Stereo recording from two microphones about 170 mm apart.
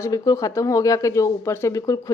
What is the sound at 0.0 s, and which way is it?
Speech, 20° left (ahead or behind).